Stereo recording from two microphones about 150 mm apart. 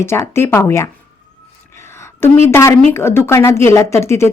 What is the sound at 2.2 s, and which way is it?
A woman's voice, 15° left (ahead or behind).